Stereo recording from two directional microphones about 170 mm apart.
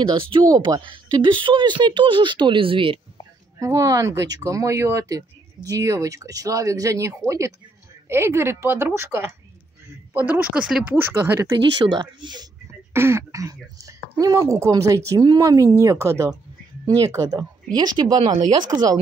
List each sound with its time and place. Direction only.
0.0 s speech: 30° right (ahead or behind)
3.5 s a woman's voice: 20° right (ahead or behind)
11.8 s speech: 25° right (ahead or behind)
12.9 s speech: 15° right (ahead or behind)